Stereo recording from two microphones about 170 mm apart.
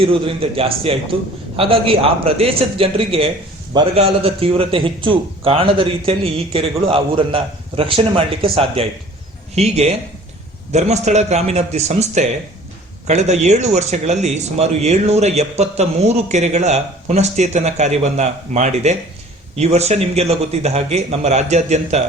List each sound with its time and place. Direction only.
0.0 s speech: 30° right (ahead or behind)